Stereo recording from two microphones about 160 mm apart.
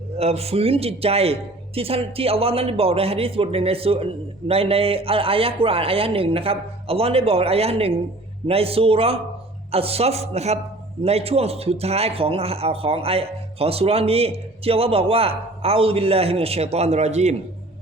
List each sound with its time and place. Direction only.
0.2 s a man's voice: 40° right (ahead or behind)